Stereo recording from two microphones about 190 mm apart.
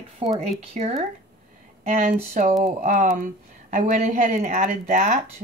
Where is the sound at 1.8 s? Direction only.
50° right (ahead or behind).